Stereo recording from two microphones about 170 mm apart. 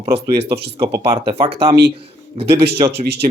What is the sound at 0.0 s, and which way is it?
Speech, 35° right (ahead or behind).